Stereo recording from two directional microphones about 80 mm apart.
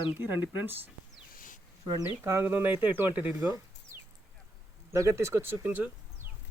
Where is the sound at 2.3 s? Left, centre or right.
Right.